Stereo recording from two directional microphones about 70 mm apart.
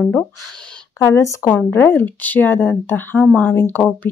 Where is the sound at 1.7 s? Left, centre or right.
Left.